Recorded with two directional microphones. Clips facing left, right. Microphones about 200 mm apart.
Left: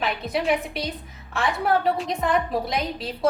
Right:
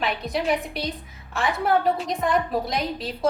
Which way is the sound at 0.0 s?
Centre (ahead or behind).